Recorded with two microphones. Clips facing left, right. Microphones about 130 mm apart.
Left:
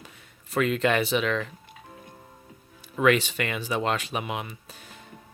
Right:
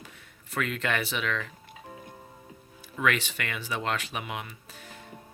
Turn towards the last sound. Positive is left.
turn(degrees=20)  # may be behind; listen again after turning